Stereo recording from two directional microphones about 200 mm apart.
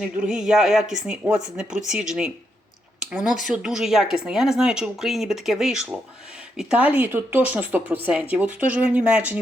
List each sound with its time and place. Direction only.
0.0 s speech: 5° right (ahead or behind)